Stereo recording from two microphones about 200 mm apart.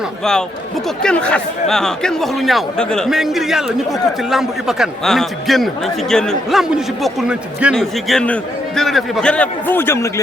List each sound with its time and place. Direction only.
1.0 s a man's voice: 5° left (ahead or behind)